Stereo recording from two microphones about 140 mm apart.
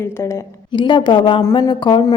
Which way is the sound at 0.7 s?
35° left (ahead or behind).